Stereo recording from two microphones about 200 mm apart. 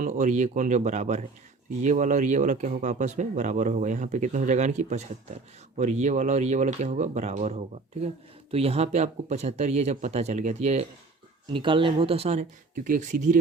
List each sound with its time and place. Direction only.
0.0 s speech: 40° right (ahead or behind)